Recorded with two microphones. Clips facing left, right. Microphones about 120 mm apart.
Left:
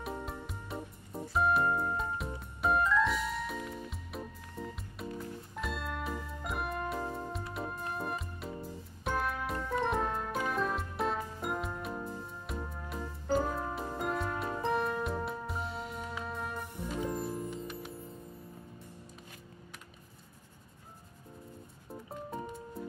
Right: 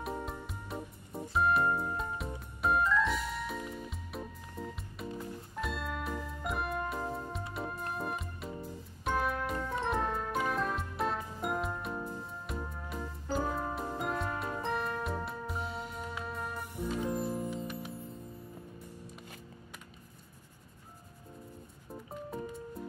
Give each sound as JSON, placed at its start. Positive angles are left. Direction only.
{"t": 0.0, "sound": "music", "side_deg": 0}